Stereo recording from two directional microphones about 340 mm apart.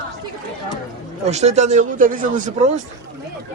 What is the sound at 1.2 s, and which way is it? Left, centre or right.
Speech, centre.